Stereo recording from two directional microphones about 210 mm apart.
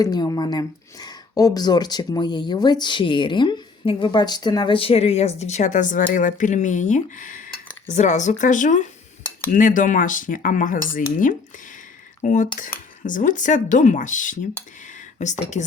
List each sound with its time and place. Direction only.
0.0 s speech: 20° left (ahead or behind); by 15.6 s 35° left (ahead or behind)